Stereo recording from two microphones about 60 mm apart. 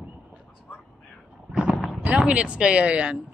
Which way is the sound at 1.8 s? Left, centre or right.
Centre.